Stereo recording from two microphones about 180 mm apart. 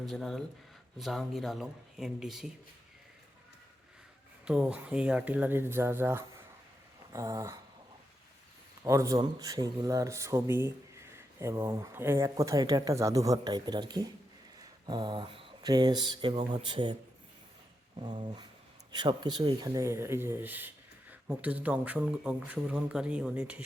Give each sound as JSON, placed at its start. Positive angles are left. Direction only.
{"t": 0.0, "sound": "speech", "side_deg": 0}
{"t": 4.4, "sound": "speech", "side_deg": -5}
{"t": 8.8, "sound": "speech", "side_deg": -15}
{"t": 14.6, "sound": "a sound", "side_deg": -25}
{"t": 18.2, "sound": "a sound", "side_deg": -25}
{"t": 18.9, "sound": "speech", "side_deg": -25}